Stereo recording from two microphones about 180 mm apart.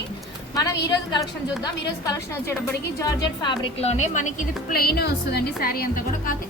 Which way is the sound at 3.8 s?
40° left (ahead or behind).